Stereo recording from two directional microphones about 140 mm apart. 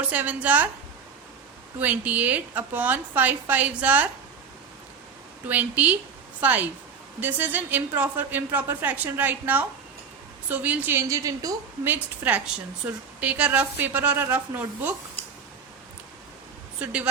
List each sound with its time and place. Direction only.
0.0 s a woman's voice: 10° right (ahead or behind)
1.8 s a woman's voice: 10° right (ahead or behind)
5.5 s a woman's voice: 10° right (ahead or behind)
12.8 s a woman's voice: 10° right (ahead or behind)
16.8 s a woman's voice: 10° right (ahead or behind)